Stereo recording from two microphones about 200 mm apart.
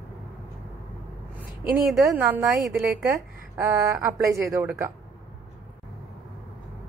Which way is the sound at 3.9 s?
5° right (ahead or behind).